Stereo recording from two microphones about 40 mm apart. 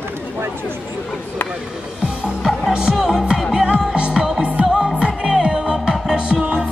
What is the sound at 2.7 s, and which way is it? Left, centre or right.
Music, right.